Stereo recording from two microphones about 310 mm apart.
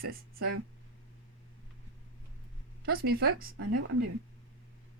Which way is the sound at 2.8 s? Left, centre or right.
Right.